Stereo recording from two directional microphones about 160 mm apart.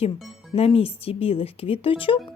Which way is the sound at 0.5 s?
40° left (ahead or behind).